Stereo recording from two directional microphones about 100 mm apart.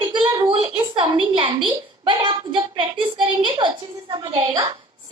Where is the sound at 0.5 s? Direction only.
65° right (ahead or behind).